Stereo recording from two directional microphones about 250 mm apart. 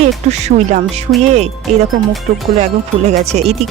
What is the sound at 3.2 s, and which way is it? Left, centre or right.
Speech, right.